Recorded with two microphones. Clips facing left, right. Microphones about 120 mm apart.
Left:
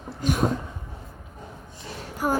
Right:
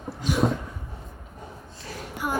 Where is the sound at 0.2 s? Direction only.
45° left (ahead or behind).